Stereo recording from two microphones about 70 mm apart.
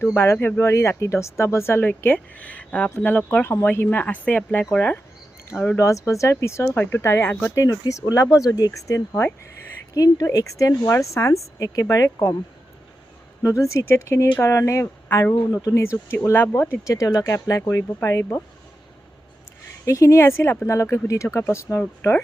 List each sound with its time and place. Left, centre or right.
0.0 s speech: left
5.7 s speech: left
7.3 s speech: left
7.5 s speech: left
9.9 s speech: left
10.2 s speech: left
13.4 s speech: left
16.3 s speech: left
16.8 s speech: left
17.7 s speech: left
19.8 s speech: left
21.8 s speech: left